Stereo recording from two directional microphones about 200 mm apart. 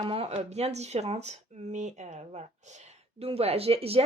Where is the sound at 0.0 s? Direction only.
30° right (ahead or behind).